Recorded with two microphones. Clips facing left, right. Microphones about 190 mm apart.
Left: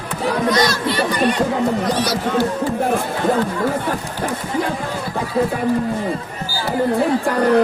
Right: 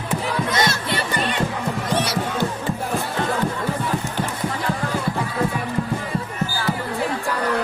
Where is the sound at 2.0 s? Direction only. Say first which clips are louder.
Left 4 dB; 25° right (ahead or behind).